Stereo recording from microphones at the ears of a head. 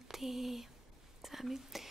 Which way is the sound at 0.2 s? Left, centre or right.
Centre.